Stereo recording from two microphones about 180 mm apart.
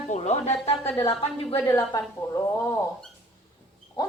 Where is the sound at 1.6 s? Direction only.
15° left (ahead or behind).